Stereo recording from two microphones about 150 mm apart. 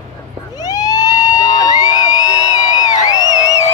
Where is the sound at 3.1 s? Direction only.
25° left (ahead or behind).